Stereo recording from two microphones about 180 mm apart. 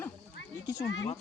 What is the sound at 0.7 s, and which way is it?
Speech, 75° left (ahead or behind).